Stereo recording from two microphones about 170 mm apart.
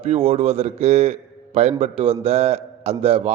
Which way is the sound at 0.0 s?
35° right (ahead or behind).